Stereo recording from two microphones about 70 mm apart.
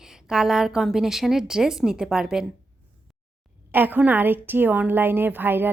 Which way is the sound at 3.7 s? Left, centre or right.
Right.